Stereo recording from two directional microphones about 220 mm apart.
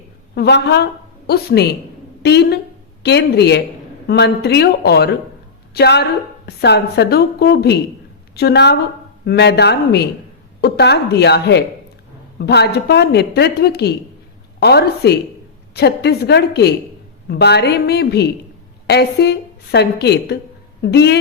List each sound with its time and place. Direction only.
0.3 s a woman's voice: 50° left (ahead or behind)